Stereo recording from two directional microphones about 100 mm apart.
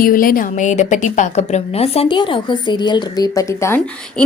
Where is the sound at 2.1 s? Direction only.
55° left (ahead or behind); by 3.7 s 35° left (ahead or behind).